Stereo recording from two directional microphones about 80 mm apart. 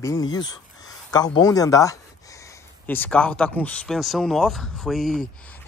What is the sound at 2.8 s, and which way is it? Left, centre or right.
Speech, left.